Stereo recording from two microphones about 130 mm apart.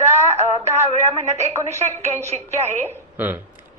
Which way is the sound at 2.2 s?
55° right (ahead or behind).